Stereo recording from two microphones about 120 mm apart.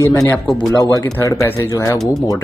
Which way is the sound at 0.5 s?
30° left (ahead or behind).